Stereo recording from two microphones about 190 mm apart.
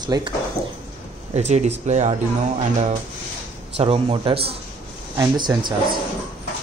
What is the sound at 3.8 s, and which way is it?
Speech, 30° right (ahead or behind).